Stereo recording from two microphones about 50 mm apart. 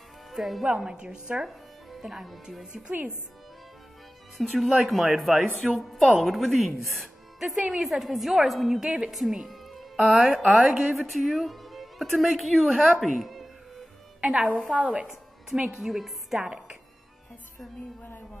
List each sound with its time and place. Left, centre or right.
0.3 s speech: centre
1.9 s speech: centre
2.6 s a woman's voice: centre
4.4 s speech: centre
13.0 s music: centre
14.2 s a woman's voice: centre
15.0 s speech: centre